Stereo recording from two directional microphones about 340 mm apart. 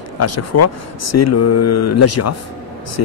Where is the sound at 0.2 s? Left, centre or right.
Left.